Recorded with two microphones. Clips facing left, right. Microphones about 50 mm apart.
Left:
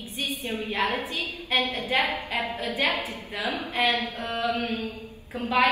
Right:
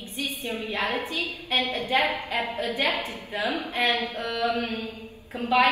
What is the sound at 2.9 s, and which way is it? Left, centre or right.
A woman's voice, right.